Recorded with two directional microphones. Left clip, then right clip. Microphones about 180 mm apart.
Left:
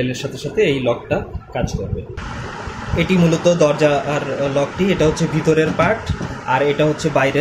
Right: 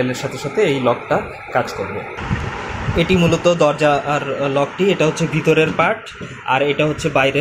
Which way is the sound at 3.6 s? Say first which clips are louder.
Even; 20° right (ahead or behind).